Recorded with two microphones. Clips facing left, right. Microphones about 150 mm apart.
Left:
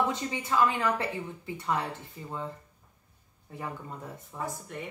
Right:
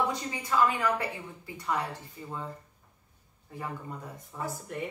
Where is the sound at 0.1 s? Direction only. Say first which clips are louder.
Left 1 dB; 25° left (ahead or behind).